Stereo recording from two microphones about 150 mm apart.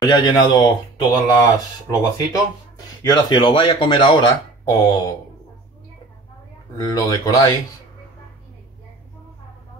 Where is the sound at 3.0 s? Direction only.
25° left (ahead or behind).